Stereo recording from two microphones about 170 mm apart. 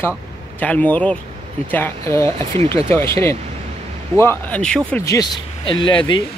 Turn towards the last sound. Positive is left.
turn(degrees=30)  # may be behind; listen again after turning